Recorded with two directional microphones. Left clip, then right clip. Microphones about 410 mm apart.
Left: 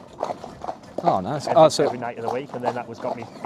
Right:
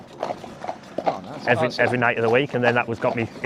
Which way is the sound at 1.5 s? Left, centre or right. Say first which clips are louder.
Left 9 dB; left.